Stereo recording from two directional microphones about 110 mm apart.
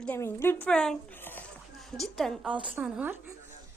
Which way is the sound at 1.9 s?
Centre (ahead or behind).